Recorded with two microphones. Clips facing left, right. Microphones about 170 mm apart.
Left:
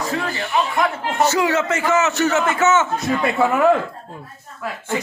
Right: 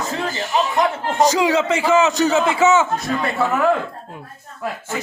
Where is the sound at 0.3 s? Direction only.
15° right (ahead or behind).